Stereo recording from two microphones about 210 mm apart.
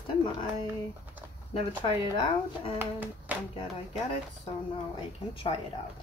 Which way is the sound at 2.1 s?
25° left (ahead or behind).